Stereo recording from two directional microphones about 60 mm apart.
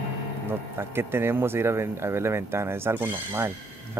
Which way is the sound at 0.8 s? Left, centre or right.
Right.